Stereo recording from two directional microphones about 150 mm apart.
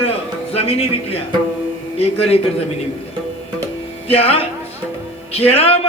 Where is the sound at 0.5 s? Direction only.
40° left (ahead or behind).